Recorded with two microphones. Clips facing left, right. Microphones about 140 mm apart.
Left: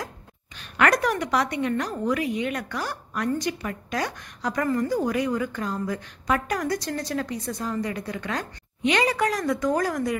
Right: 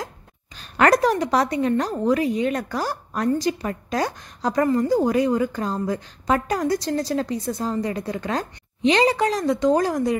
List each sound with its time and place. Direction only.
0.6 s a woman's voice: 35° right (ahead or behind)